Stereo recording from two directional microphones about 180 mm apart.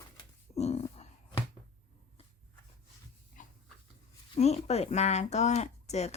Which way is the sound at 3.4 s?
45° left (ahead or behind).